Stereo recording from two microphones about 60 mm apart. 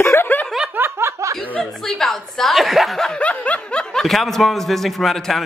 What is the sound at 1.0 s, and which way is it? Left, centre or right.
Chuckle, right.